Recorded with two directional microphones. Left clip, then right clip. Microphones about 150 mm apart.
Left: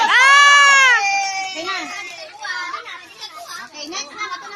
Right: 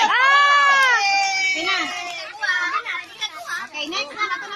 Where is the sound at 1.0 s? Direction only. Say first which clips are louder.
Right 1 dB; 45° left (ahead or behind).